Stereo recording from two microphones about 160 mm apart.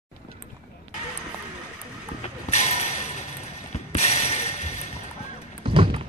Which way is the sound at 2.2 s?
45° left (ahead or behind).